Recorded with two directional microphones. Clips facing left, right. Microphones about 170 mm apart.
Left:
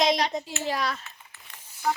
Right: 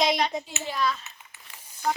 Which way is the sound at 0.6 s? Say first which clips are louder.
Right 1 dB; 80° left.